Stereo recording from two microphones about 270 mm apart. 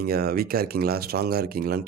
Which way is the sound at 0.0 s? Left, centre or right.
Right.